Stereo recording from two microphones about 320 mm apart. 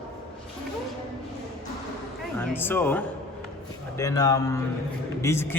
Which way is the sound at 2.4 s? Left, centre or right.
Centre.